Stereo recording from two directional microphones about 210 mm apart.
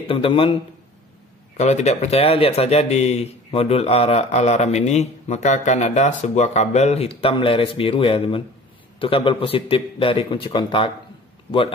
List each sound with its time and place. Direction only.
0.0 s a man's voice: 25° left (ahead or behind)
1.6 s a man's voice: 30° left (ahead or behind)